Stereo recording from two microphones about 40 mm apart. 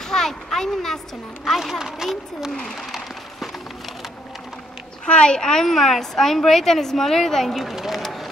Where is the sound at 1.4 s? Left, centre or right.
Centre.